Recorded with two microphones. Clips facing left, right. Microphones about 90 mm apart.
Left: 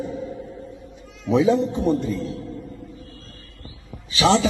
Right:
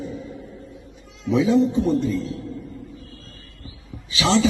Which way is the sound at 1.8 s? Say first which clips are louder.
Even; 55° left (ahead or behind).